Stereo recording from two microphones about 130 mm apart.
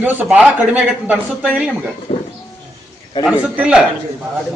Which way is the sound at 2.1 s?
60° left (ahead or behind).